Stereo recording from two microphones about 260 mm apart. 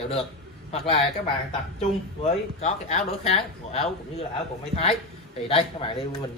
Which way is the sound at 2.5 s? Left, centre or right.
Left.